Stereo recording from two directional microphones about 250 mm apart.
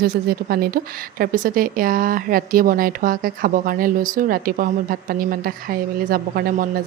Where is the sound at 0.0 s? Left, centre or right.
Right.